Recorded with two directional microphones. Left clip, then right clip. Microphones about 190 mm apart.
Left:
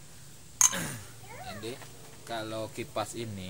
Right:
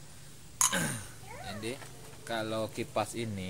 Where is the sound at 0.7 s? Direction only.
40° right (ahead or behind).